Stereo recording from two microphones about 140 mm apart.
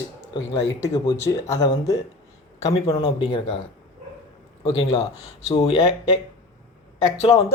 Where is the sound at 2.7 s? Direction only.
40° left (ahead or behind).